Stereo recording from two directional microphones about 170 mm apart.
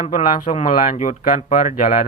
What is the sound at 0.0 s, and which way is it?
Speech, 45° left (ahead or behind).